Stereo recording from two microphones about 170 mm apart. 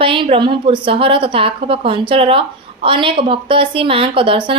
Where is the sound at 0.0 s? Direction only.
30° right (ahead or behind).